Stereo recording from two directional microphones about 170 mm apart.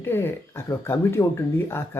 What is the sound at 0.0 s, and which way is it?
Speech, 15° left (ahead or behind).